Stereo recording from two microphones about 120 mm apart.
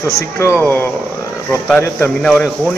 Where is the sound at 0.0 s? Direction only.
20° left (ahead or behind).